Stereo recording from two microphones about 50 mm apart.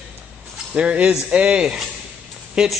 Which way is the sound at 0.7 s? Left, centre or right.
Right.